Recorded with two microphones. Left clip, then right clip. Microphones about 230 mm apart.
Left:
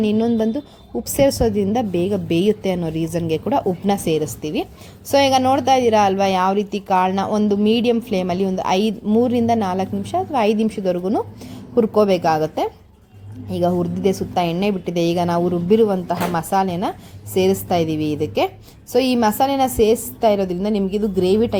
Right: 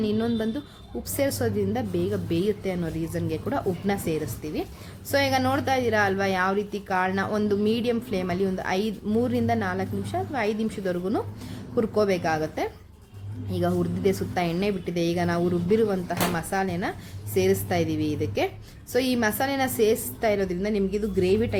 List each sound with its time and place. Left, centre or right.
0.0 s a woman's voice: left